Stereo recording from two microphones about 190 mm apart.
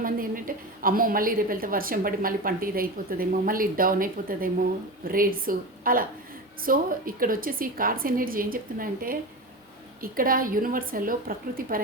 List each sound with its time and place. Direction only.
0.0 s a woman's voice: 50° right (ahead or behind)